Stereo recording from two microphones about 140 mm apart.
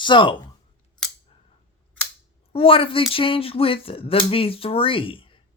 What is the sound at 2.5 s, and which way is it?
Speech, 40° left (ahead or behind).